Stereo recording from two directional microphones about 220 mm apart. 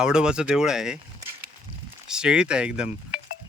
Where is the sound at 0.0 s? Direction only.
5° right (ahead or behind).